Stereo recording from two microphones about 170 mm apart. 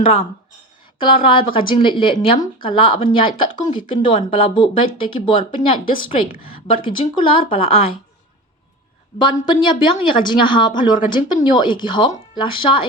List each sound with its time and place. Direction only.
0.0 s speech: 35° left (ahead or behind)
9.2 s speech: 30° left (ahead or behind)